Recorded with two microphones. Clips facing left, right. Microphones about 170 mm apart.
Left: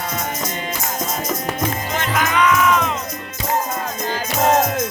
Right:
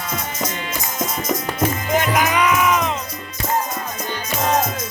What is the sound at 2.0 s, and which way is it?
Music, 10° right (ahead or behind).